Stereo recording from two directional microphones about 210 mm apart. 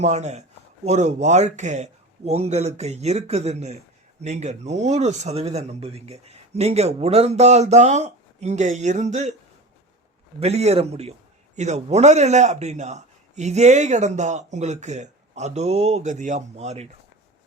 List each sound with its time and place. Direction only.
0.0 s a man's voice: 35° right (ahead or behind)
10.4 s a man's voice: 30° right (ahead or behind)